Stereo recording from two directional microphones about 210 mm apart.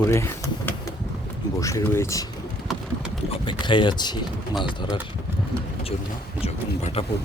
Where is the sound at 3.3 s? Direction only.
25° left (ahead or behind).